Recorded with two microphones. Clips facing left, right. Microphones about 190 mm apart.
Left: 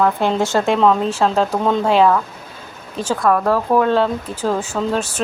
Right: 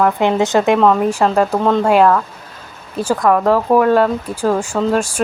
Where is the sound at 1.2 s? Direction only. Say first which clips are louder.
Right 2 dB; 5° right (ahead or behind).